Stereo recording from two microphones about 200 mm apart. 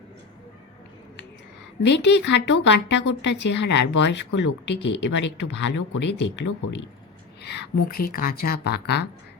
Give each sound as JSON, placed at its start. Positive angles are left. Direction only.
{"t": 1.8, "sound": "a woman's voice", "side_deg": 60}
{"t": 7.4, "sound": "a woman's voice", "side_deg": 55}